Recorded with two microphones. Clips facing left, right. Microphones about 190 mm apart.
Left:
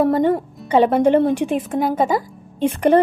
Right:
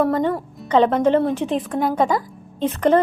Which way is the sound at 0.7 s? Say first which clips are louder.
Left 2 dB; 10° left (ahead or behind).